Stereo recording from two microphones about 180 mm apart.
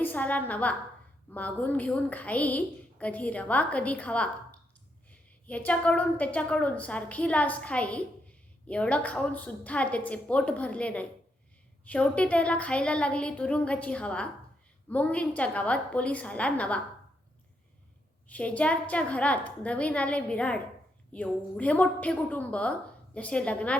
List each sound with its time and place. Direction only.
0.0 s a woman's voice: 10° left (ahead or behind)
18.3 s a woman's voice: 10° left (ahead or behind)